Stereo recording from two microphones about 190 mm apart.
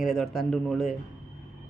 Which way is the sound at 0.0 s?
Centre (ahead or behind).